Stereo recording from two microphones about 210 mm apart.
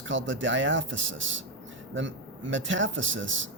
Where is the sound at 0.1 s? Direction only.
65° right (ahead or behind).